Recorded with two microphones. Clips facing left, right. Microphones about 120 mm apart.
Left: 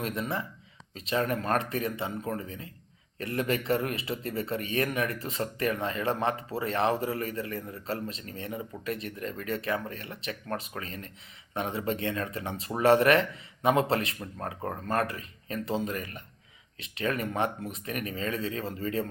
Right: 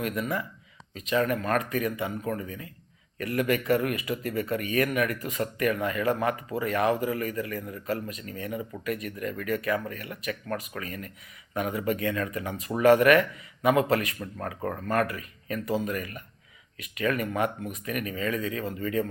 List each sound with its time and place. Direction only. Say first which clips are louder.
0.0 s a man's voice: right 2 dB; 30° left (ahead or behind)